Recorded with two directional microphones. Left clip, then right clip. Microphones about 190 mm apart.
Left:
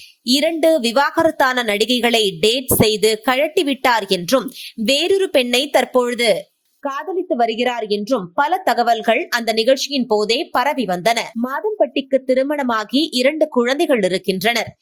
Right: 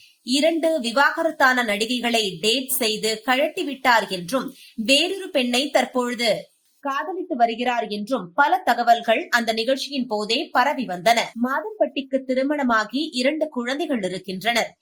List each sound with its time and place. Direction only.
0.3 s a woman's voice: 45° left (ahead or behind)